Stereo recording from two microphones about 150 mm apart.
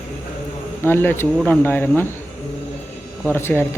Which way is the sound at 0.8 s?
15° left (ahead or behind).